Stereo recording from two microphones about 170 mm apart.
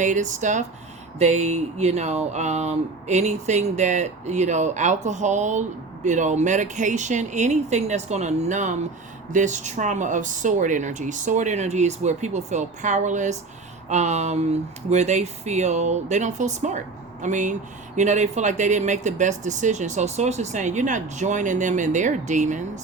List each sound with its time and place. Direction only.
0.0 s speech: 45° right (ahead or behind)